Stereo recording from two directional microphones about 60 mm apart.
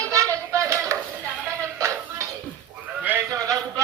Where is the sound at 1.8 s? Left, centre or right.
Right.